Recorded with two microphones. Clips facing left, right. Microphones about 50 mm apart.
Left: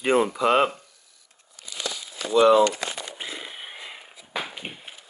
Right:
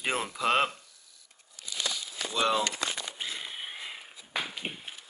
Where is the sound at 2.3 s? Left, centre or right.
Centre.